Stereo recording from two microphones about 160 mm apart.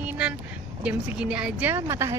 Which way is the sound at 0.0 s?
10° right (ahead or behind).